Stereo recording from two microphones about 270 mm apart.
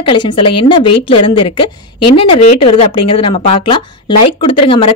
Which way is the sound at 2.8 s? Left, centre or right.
Centre.